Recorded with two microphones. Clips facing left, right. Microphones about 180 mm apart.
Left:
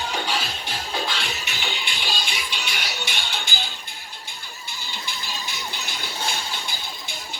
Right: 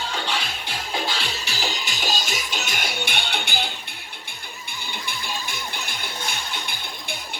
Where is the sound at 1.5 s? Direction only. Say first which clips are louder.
Right 2 dB; 40° right (ahead or behind).